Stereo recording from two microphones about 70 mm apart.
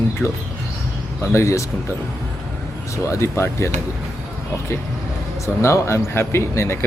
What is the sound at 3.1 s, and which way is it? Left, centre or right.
Speech, left.